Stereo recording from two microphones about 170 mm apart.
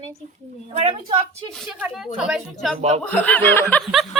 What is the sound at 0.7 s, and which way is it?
Speech, 40° right (ahead or behind).